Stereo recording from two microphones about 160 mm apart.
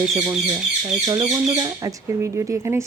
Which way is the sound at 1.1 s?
25° right (ahead or behind).